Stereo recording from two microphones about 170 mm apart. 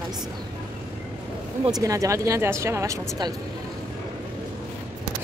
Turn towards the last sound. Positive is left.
turn(degrees=-20)  # may be behind; listen again after turning